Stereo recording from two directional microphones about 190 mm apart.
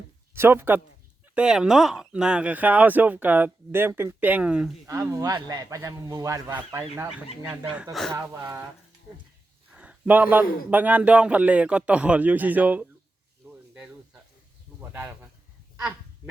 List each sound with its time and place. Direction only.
0.3 s speech: 10° right (ahead or behind)
4.9 s speech: 15° right (ahead or behind)
9.7 s speech: 5° right (ahead or behind)
13.7 s snake: 5° right (ahead or behind)
14.8 s a sound: 10° right (ahead or behind)